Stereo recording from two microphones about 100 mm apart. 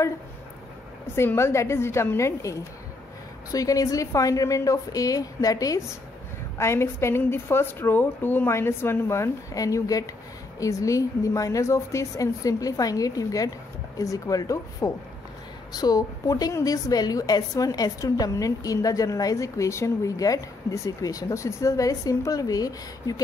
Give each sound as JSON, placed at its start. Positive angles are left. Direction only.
{"t": 1.1, "sound": "a woman's voice", "side_deg": 25}
{"t": 3.5, "sound": "a woman's voice", "side_deg": 35}